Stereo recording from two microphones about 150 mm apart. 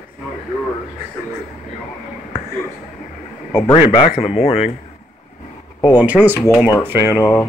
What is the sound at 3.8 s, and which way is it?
Speech, 45° left (ahead or behind).